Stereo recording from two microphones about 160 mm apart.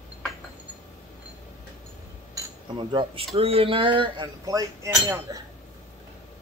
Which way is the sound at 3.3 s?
35° right (ahead or behind).